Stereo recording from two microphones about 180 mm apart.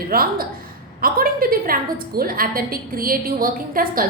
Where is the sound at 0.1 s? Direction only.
55° right (ahead or behind).